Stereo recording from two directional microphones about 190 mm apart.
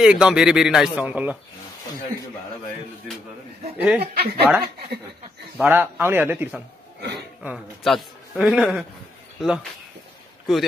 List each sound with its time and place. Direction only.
0.0 s a man's voice: 5° right (ahead or behind)
3.7 s a man's voice: 5° right (ahead or behind)
4.0 s speech: 55° right (ahead or behind)
5.6 s a man's voice: 10° right (ahead or behind)
7.0 s speech: 60° right (ahead or behind)
7.4 s a man's voice: centre (ahead or behind)